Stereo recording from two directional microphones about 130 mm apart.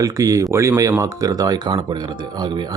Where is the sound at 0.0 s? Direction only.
25° right (ahead or behind).